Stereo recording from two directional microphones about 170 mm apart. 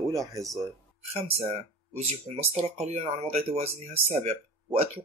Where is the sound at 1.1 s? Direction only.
40° right (ahead or behind).